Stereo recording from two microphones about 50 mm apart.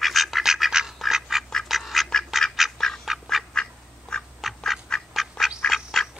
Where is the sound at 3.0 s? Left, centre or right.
Centre.